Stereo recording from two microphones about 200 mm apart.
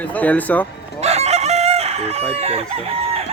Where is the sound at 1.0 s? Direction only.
35° right (ahead or behind).